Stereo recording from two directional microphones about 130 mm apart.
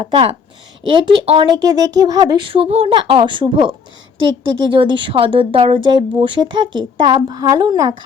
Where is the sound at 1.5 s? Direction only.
30° right (ahead or behind).